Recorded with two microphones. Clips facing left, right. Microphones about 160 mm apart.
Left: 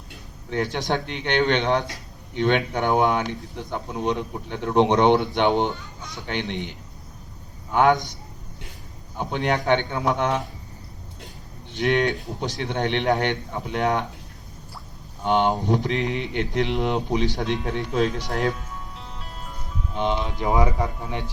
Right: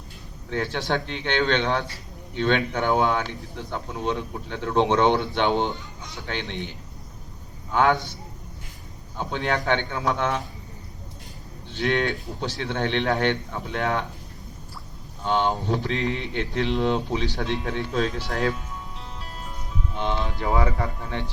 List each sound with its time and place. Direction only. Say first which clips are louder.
0.5 s a man's voice: left 1 dB; 15° left (ahead or behind)
11.7 s a man's voice: left 3 dB; 15° left (ahead or behind)
15.2 s a man's voice: left 3 dB; 15° left (ahead or behind)
20.0 s a man's voice: left 3 dB; 15° left (ahead or behind)